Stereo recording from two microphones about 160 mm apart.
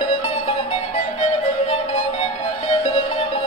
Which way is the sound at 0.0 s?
35° left (ahead or behind).